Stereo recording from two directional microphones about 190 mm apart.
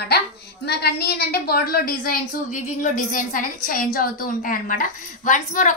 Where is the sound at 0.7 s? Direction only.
55° left (ahead or behind).